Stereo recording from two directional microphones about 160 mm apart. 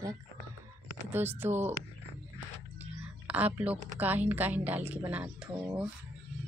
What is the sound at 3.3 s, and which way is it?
A woman's voice, 10° right (ahead or behind).